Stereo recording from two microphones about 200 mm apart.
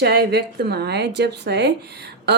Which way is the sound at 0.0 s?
55° right (ahead or behind).